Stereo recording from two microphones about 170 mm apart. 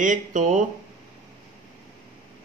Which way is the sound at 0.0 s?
50° right (ahead or behind).